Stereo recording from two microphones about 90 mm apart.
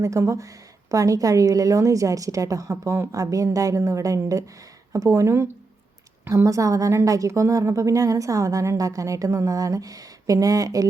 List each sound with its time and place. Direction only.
0.0 s a woman's voice: 35° right (ahead or behind)